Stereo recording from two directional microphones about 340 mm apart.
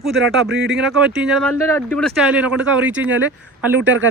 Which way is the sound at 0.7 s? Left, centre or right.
Centre.